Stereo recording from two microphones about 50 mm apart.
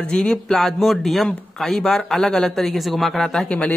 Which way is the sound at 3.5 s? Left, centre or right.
Left.